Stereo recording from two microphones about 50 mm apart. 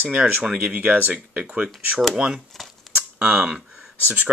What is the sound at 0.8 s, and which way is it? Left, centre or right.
Speech, right.